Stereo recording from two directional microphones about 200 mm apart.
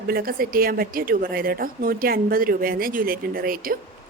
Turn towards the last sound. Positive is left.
turn(degrees=-45)  # may be behind; listen again after turning